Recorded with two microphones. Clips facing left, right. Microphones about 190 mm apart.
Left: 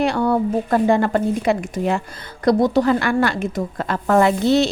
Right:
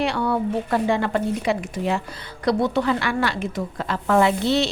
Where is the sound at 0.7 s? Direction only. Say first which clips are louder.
Left 5 dB; 45° left (ahead or behind).